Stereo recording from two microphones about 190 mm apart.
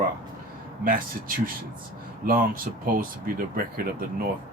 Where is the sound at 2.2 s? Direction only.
45° right (ahead or behind).